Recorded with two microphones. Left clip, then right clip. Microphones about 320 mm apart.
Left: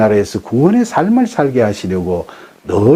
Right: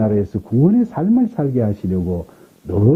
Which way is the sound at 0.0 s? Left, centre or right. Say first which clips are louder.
Left 8 dB; centre.